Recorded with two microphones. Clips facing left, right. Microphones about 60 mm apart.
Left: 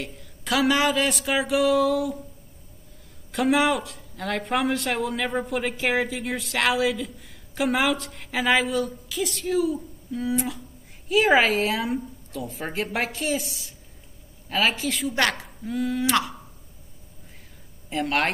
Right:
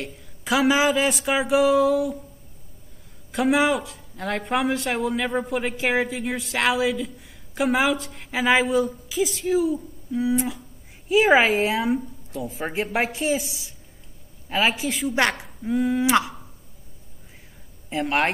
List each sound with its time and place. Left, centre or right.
0.0 s speech: centre
3.3 s speech: centre
15.1 s a woman's voice: centre
15.8 s speech: centre
17.8 s speech: centre